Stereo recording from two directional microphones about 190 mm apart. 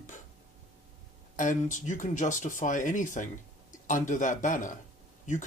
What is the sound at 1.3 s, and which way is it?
Speech, 45° left (ahead or behind).